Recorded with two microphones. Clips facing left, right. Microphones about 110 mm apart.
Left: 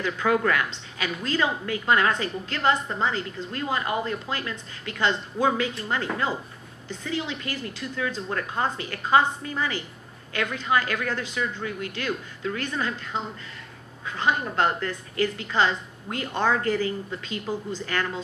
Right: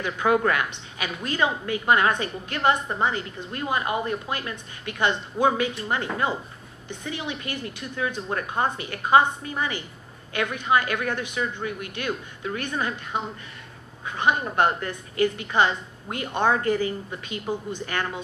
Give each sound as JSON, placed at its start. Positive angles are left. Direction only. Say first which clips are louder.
{"t": 0.0, "sound": "a woman's voice", "louder": "right 1 dB", "side_deg": -25}